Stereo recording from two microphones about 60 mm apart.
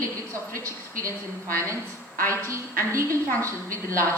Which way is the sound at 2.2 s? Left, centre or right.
Right.